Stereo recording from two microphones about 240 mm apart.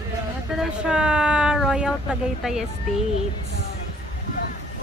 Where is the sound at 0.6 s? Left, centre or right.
Centre.